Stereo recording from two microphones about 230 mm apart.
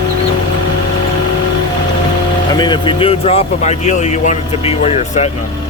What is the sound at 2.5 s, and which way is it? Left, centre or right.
Speech, centre.